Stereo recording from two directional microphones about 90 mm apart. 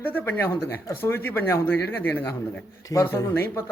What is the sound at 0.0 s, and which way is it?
A man's voice, 20° left (ahead or behind).